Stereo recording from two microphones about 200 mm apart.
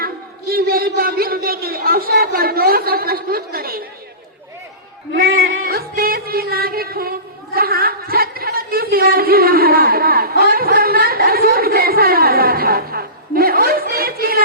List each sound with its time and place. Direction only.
0.5 s a man's voice: 50° right (ahead or behind)
5.2 s a sound: 80° right
5.6 s music: 50° right (ahead or behind)